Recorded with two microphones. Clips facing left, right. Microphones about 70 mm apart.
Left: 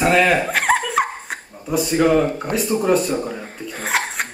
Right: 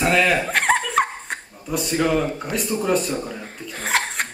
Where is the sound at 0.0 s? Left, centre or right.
Centre.